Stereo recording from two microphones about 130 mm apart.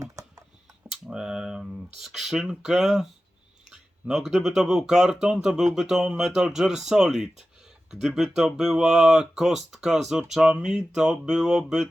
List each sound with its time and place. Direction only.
0.0 s tick-tock: 25° right (ahead or behind)
0.9 s computer keyboard: 5° right (ahead or behind)
2.0 s speech: 5° right (ahead or behind)